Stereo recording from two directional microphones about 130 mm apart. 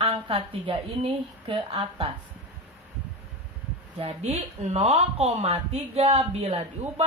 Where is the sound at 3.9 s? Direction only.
50° right (ahead or behind).